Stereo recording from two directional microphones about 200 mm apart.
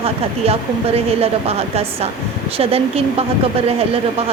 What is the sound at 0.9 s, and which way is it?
A woman's voice, 30° right (ahead or behind).